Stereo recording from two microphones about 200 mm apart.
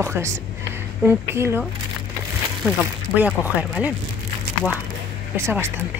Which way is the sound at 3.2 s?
10° right (ahead or behind).